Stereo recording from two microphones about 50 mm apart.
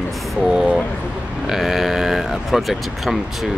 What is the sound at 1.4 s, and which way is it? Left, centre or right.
Speech, centre.